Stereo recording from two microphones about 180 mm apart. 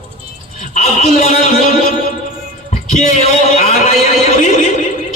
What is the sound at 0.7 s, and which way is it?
Speech, 40° left (ahead or behind).